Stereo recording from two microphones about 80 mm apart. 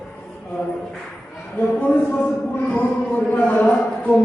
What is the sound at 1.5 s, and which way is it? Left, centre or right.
Speech, left.